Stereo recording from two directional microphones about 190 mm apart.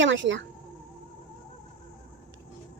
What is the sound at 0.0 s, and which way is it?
Speech, 75° right (ahead or behind).